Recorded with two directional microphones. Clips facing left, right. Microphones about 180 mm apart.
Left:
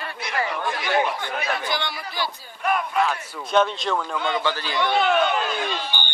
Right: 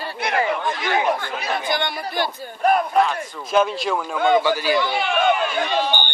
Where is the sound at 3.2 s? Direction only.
5° left (ahead or behind).